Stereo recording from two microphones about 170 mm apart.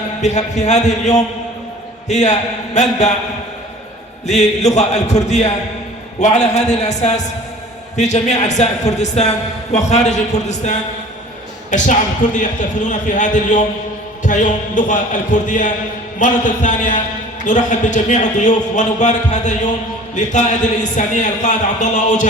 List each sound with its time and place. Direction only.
0.2 s a man's voice: 45° left (ahead or behind)
4.3 s a man's voice: 40° left (ahead or behind)